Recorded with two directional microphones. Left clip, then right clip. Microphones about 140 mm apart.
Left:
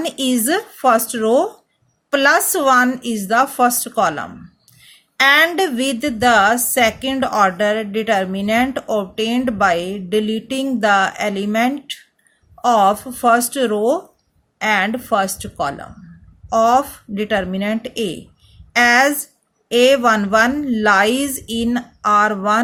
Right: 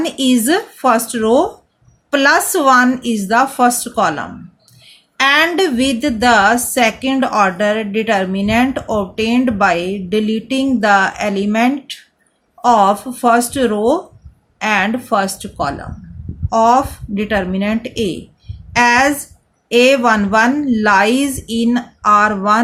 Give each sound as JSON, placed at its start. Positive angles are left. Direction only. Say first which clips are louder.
{"t": 0.0, "sound": "a woman's voice", "louder": "right 4 dB", "side_deg": 35}